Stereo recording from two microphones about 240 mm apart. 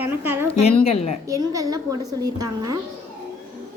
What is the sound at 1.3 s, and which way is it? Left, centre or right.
A child's voice, centre.